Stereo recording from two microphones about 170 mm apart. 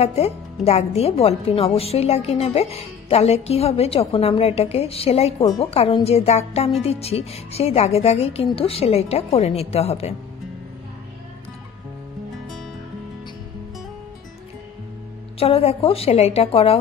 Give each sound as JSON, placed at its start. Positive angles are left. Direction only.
{"t": 0.0, "sound": "a woman's voice", "side_deg": 40}
{"t": 15.3, "sound": "a woman's voice", "side_deg": 35}